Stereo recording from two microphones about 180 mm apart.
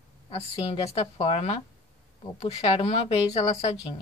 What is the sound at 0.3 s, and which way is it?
Speech, 35° left (ahead or behind).